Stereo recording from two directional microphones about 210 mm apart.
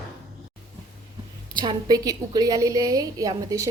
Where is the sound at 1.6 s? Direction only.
20° right (ahead or behind).